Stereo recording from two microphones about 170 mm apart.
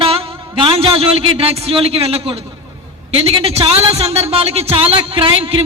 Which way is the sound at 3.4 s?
35° right (ahead or behind).